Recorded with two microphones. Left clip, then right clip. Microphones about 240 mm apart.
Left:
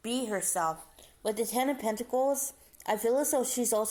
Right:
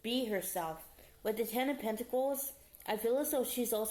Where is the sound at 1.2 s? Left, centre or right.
Left.